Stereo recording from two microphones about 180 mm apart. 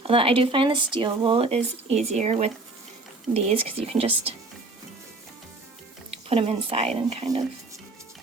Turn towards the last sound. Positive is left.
turn(degrees=-35)  # may be behind; listen again after turning